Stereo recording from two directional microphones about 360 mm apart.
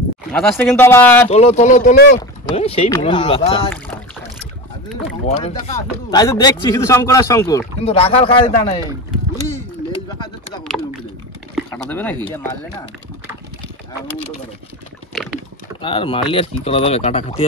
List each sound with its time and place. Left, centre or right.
0.3 s speech: centre
1.3 s speech: centre
5.3 s speech: centre
10.0 s a sound: centre
12.3 s speech: centre
15.8 s speech: centre